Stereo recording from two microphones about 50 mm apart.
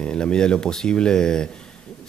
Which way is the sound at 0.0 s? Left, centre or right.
Centre.